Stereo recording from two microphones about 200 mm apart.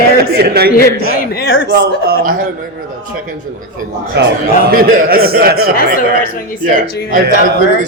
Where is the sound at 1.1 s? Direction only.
50° left (ahead or behind).